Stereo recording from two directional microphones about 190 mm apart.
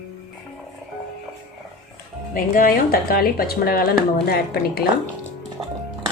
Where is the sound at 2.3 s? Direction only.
50° left (ahead or behind).